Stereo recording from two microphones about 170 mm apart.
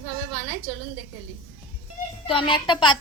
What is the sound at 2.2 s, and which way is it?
Speech, 30° left (ahead or behind).